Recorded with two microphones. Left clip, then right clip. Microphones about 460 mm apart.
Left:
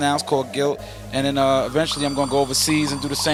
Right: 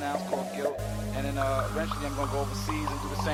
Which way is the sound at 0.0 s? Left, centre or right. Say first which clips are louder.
Left 10 dB; left.